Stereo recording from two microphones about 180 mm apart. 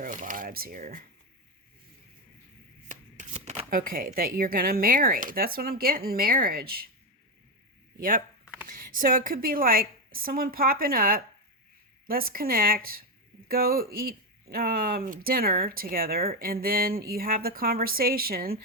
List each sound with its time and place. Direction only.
0.0 s a woman's voice: 45° right (ahead or behind)
2.9 s speech: 40° right (ahead or behind)
7.9 s a woman's voice: 50° right (ahead or behind)